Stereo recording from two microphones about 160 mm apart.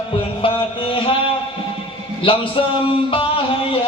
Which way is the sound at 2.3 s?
30° left (ahead or behind).